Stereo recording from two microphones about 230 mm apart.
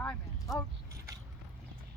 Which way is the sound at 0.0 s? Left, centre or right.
Centre.